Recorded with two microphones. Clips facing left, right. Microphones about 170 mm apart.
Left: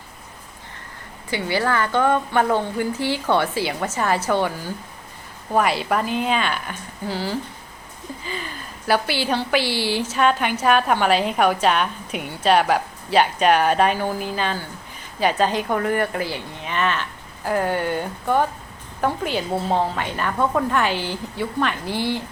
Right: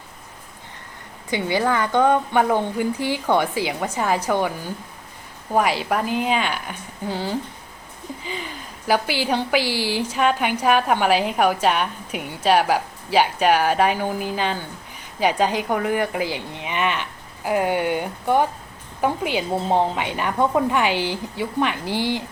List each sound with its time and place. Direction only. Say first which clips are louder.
1.3 s a woman's voice: right 1 dB; 20° right (ahead or behind)